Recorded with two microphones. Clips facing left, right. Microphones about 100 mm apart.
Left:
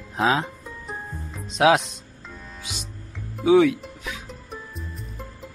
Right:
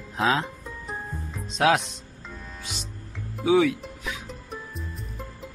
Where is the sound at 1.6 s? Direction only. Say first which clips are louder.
Left 3 dB; 10° left (ahead or behind).